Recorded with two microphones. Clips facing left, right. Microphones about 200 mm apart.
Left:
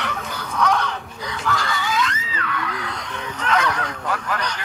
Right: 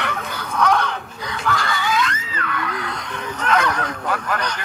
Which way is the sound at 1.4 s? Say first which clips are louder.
Right 2 dB; 55° right (ahead or behind).